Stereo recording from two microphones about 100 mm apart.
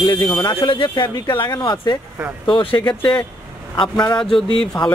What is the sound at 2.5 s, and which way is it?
Speech, 55° left (ahead or behind).